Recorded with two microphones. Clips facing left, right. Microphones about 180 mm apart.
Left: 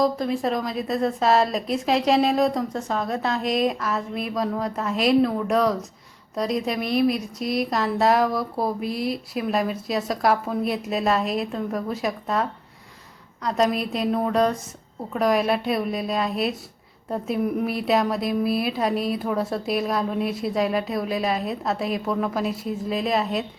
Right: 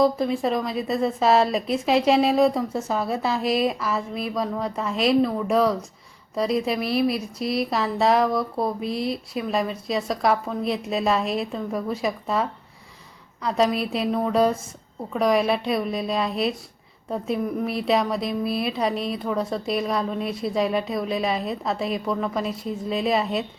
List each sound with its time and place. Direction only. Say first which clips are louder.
0.0 s a woman's voice: right 2 dB; centre (ahead or behind)